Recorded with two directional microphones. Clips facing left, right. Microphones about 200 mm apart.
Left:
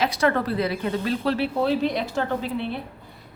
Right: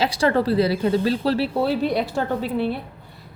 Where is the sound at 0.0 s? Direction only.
30° right (ahead or behind).